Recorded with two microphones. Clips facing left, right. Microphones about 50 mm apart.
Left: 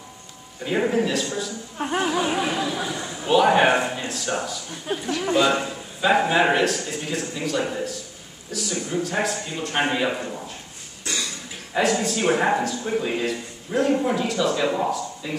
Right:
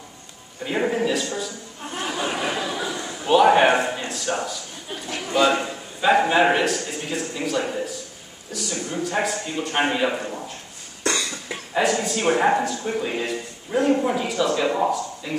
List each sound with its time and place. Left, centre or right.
0.7 s speech: centre
2.0 s speech: centre
2.4 s speech: centre
4.9 s speech: left
5.5 s speech: centre
11.1 s cough: right
11.7 s speech: centre